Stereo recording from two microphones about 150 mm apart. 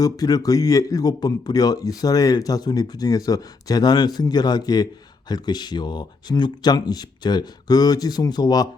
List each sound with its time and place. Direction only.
0.0 s a man's voice: 25° left (ahead or behind)